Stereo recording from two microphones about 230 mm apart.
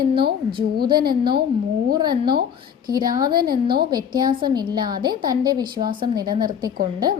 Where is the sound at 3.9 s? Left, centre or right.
Centre.